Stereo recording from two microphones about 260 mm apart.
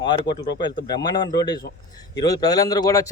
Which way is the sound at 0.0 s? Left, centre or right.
Centre.